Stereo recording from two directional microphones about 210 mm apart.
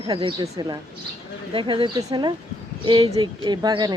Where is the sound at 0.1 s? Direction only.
25° right (ahead or behind).